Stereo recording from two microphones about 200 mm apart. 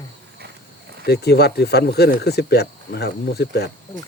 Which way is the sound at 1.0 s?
55° left (ahead or behind).